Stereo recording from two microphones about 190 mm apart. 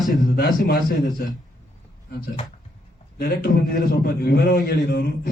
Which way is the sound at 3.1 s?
55° left (ahead or behind).